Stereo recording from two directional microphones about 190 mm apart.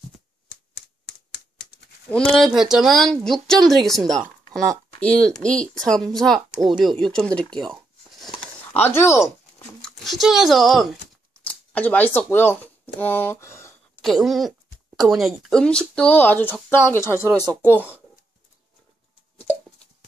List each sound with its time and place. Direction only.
0.5 s typewriter: 65° left (ahead or behind)
2.0 s speech: 5° left (ahead or behind)
8.7 s speech: 10° left (ahead or behind)
9.8 s speech: centre (ahead or behind)
13.9 s speech: centre (ahead or behind)
17.1 s speech: 15° right (ahead or behind)
17.5 s speech: 10° left (ahead or behind)